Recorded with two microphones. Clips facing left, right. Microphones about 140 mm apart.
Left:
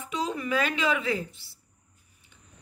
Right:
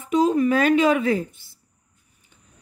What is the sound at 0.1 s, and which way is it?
A woman's voice, 45° right (ahead or behind).